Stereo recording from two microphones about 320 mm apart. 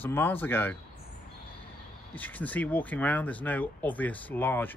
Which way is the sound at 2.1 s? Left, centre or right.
Centre.